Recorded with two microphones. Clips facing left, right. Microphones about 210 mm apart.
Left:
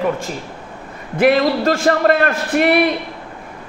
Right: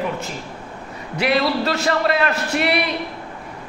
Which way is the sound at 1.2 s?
50° left (ahead or behind).